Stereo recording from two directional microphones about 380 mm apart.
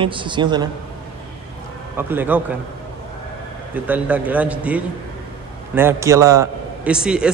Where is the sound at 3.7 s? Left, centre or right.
Centre.